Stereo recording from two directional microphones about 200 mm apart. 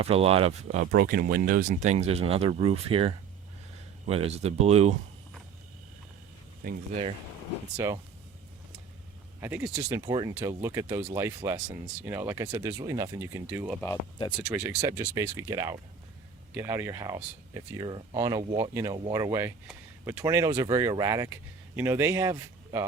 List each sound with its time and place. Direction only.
0.0 s speech: 30° right (ahead or behind)
0.9 s speech: 50° right (ahead or behind); by 4.9 s 30° right (ahead or behind)
6.6 s speech: 45° right (ahead or behind)
7.8 s speech: 15° right (ahead or behind)
9.4 s speech: 10° right (ahead or behind)
13.8 s speech: 20° left (ahead or behind)
14.5 s speech: 15° right (ahead or behind)